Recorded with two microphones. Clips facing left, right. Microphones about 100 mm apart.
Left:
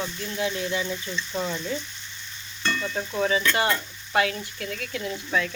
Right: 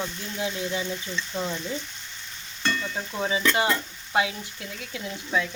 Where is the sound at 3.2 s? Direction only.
15° right (ahead or behind).